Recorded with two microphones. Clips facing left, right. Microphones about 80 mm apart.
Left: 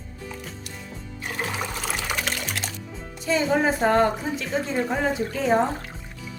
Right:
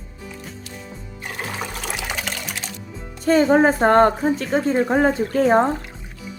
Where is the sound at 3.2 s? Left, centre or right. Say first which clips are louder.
Right 7 dB; right.